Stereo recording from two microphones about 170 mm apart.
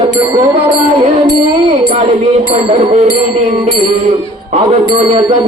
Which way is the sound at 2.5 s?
40° right (ahead or behind).